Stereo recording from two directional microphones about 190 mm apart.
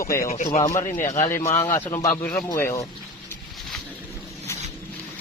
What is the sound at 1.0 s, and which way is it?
Speech, 40° left (ahead or behind).